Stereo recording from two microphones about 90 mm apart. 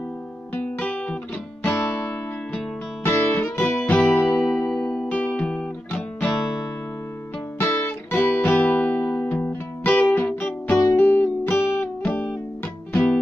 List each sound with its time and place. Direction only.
0.6 s guitar: 15° left (ahead or behind)
1.8 s music: 5° left (ahead or behind)
3.0 s music: 20° left (ahead or behind)
7.5 s guitar: 20° left (ahead or behind)
11.0 s music: 20° left (ahead or behind)
12.9 s music: 15° left (ahead or behind)